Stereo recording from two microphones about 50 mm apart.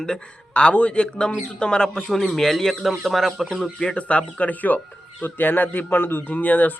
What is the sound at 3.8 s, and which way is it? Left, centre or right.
Speech, left.